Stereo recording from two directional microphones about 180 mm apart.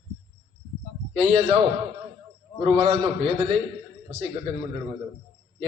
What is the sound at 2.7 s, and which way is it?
Speech, 35° right (ahead or behind).